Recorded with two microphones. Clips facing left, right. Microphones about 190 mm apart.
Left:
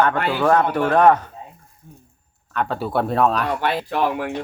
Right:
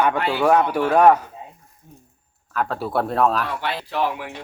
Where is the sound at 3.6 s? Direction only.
50° left (ahead or behind).